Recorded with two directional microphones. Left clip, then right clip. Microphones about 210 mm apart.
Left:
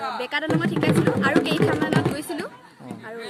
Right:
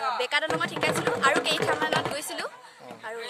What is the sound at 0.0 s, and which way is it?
Music, 25° right (ahead or behind).